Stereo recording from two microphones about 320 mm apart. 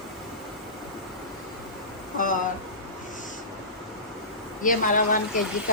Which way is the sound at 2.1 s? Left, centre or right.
Left.